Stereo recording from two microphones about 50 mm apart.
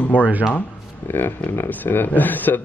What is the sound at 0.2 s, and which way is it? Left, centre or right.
Speech, right.